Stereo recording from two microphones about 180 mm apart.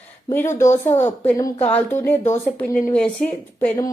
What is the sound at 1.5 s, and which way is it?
Speech, 35° left (ahead or behind).